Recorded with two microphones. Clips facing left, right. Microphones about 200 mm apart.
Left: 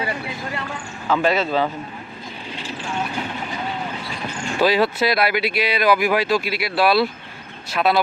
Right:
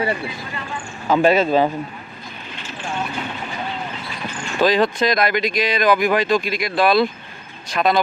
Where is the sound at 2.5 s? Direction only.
35° left (ahead or behind).